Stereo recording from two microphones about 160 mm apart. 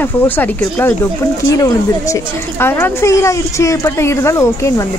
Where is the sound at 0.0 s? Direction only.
10° left (ahead or behind).